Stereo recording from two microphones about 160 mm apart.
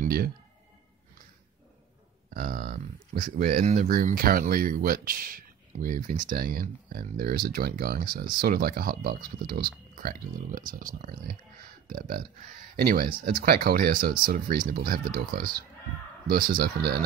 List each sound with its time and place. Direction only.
0.0 s a sound: 70° right (ahead or behind)
2.3 s speech: 65° right (ahead or behind); by 3.9 s 50° right (ahead or behind)
3.9 s speech: 60° right (ahead or behind)